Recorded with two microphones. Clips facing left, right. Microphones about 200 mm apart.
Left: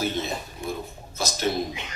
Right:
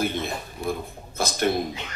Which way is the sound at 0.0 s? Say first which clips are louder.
Right 1 dB; 55° right (ahead or behind).